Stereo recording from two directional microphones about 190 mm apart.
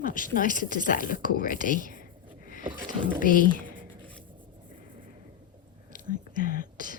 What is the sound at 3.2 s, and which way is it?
Speech, 45° left (ahead or behind).